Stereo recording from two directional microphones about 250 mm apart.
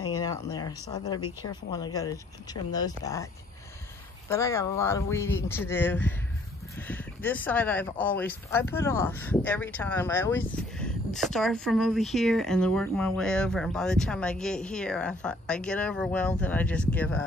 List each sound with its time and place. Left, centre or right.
0.0 s speech: centre
4.3 s speech: centre